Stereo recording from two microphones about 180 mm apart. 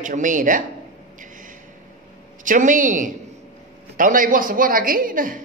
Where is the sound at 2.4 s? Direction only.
45° right (ahead or behind).